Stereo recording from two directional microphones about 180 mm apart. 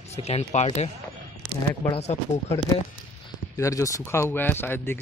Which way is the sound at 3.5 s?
15° left (ahead or behind).